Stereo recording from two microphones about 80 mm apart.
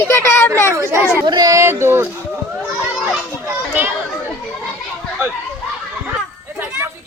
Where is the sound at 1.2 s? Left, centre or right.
Right.